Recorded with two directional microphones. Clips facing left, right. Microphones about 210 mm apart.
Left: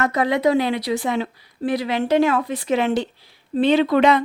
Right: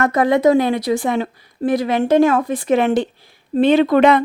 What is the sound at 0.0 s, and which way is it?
A woman's voice, 50° right (ahead or behind).